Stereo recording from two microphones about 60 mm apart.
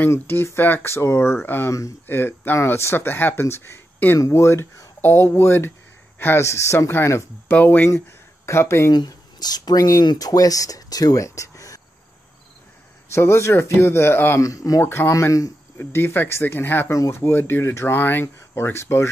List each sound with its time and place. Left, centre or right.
0.6 s a man's voice: left
6.4 s speech: left
7.4 s speech: left
8.5 s speech: left
9.5 s speech: left
13.1 s speech: left
14.4 s speech: left
14.8 s speech: left
15.8 s speech: left
16.9 s speech: left
17.2 s speech: left